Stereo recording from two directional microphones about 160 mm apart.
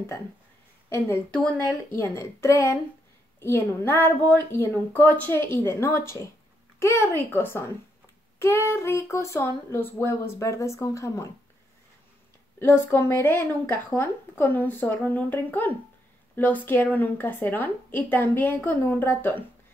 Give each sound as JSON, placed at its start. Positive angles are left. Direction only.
{"t": 0.8, "sound": "speech", "side_deg": 15}
{"t": 12.5, "sound": "speech", "side_deg": 15}